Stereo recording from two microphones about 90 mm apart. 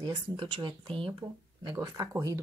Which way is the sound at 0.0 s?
60° right (ahead or behind).